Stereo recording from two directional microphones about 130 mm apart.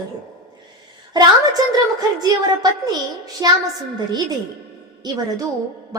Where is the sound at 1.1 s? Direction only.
35° right (ahead or behind).